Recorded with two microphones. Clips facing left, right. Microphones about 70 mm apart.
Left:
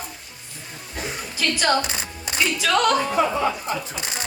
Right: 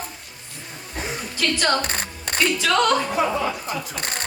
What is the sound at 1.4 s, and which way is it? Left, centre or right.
Speech, centre.